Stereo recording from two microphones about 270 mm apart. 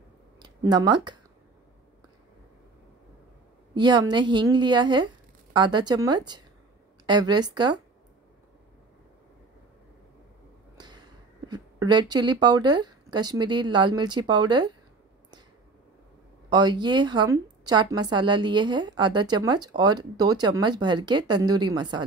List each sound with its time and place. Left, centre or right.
0.4 s speech: centre
3.7 s a woman's voice: centre
10.8 s speech: centre
16.4 s a woman's voice: centre